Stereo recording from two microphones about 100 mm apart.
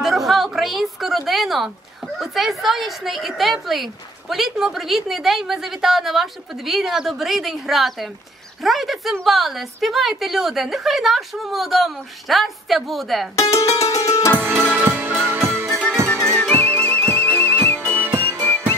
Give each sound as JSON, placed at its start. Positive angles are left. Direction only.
{"t": 0.0, "sound": "a sound", "side_deg": 0}
{"t": 2.1, "sound": "a woman's voice", "side_deg": 0}
{"t": 13.4, "sound": "music", "side_deg": 30}
{"t": 14.4, "sound": "music", "side_deg": -25}
{"t": 16.7, "sound": "music", "side_deg": 15}
{"t": 17.0, "sound": "music", "side_deg": -75}
{"t": 17.9, "sound": "whistle", "side_deg": -20}
{"t": 18.4, "sound": "whistle", "side_deg": 15}